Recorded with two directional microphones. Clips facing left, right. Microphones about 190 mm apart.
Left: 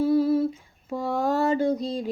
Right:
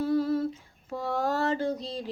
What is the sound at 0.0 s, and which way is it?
Humming, 10° left (ahead or behind).